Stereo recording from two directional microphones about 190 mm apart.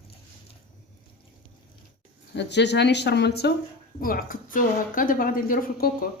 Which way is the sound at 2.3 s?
65° left (ahead or behind).